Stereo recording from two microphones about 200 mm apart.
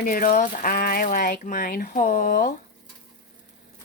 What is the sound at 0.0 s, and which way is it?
Speech, 45° left (ahead or behind).